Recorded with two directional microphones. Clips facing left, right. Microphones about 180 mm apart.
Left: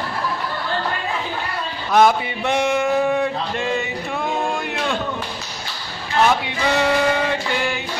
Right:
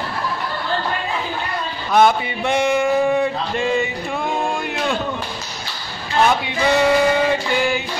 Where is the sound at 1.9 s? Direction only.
Centre (ahead or behind).